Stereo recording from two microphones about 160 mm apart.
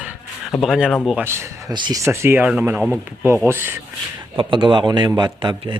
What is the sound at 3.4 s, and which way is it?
Speech, 15° right (ahead or behind).